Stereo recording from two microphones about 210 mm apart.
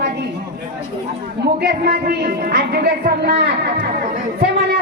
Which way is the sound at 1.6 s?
50° right (ahead or behind).